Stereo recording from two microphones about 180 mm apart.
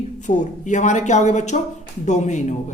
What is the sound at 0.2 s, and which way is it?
A woman's voice, 45° left (ahead or behind).